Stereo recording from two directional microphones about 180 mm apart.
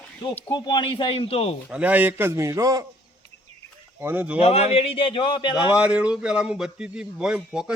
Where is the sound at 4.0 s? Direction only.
10° right (ahead or behind).